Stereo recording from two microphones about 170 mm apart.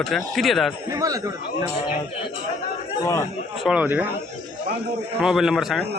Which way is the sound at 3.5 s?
5° right (ahead or behind).